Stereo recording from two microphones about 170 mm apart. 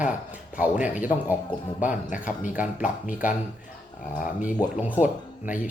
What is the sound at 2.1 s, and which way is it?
A man's voice, 50° left (ahead or behind).